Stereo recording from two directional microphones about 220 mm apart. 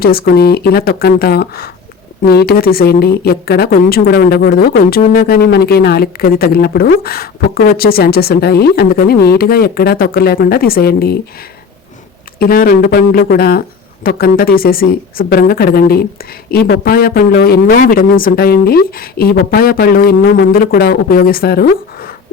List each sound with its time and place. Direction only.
0.0 s speech: 45° left (ahead or behind)
12.4 s speech: 40° left (ahead or behind)